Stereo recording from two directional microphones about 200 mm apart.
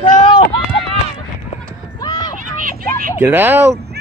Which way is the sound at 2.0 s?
20° left (ahead or behind).